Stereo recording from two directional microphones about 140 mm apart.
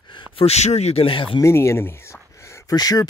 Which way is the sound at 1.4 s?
20° left (ahead or behind).